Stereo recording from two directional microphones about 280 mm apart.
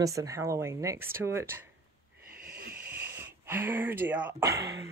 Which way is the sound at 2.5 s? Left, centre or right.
Right.